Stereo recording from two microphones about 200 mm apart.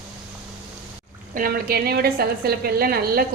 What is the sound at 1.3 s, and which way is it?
A woman's voice, 45° right (ahead or behind).